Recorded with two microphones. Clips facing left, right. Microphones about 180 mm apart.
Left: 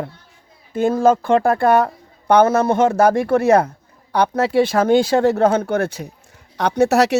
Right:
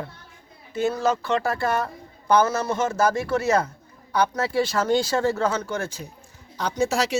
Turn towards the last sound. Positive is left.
turn(degrees=65)  # may be behind; listen again after turning